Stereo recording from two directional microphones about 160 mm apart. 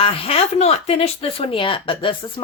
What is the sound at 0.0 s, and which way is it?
Speech, 35° left (ahead or behind).